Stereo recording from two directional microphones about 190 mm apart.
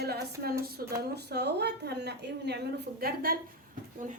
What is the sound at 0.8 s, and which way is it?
A woman's voice, 50° right (ahead or behind).